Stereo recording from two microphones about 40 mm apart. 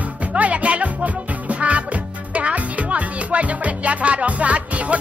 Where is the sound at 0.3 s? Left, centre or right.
Right.